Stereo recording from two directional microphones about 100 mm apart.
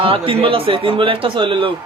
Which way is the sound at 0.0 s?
60° right (ahead or behind).